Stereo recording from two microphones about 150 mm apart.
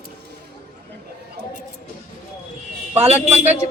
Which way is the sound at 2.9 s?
45° right (ahead or behind).